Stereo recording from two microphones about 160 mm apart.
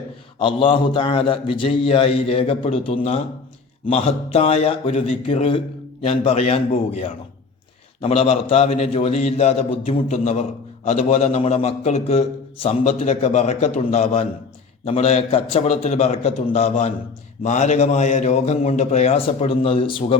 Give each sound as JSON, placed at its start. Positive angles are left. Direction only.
{"t": 0.3, "sound": "a man's voice", "side_deg": 35}